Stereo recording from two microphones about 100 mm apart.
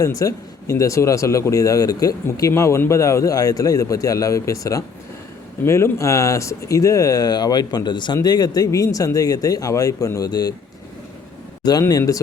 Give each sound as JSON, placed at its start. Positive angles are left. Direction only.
{"t": 0.0, "sound": "speech", "side_deg": 35}
{"t": 11.6, "sound": "speech", "side_deg": 40}